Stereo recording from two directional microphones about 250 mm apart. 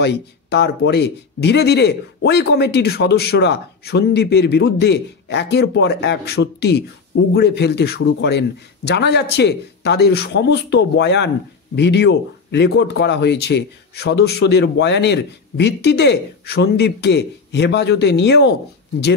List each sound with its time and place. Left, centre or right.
0.0 s speech: left